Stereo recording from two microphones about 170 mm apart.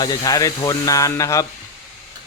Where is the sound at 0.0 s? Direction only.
25° left (ahead or behind).